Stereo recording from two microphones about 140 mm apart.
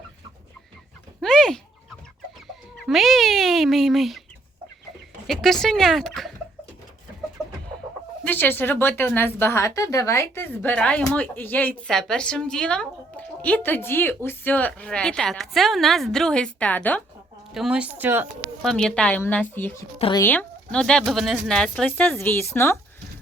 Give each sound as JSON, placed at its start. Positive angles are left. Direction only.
{"t": 1.2, "sound": "a sound", "side_deg": 5}
{"t": 2.8, "sound": "a woman's voice", "side_deg": 0}
{"t": 5.3, "sound": "a woman's voice", "side_deg": 0}
{"t": 8.2, "sound": "a woman's voice", "side_deg": 15}
{"t": 17.5, "sound": "speech", "side_deg": -5}
{"t": 18.6, "sound": "a woman's voice", "side_deg": 5}